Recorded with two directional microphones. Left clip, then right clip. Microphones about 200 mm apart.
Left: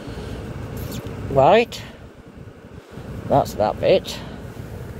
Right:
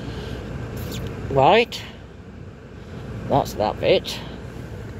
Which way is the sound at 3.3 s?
15° left (ahead or behind).